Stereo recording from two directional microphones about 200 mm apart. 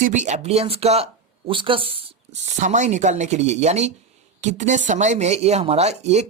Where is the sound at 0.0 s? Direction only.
35° right (ahead or behind).